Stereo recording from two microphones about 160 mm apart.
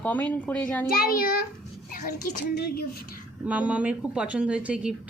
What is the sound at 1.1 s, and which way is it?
A child's voice, 65° left (ahead or behind).